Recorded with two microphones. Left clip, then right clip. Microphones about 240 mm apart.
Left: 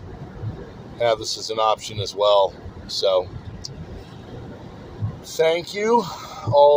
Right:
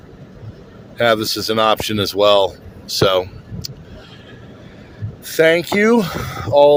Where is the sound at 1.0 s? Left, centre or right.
Right.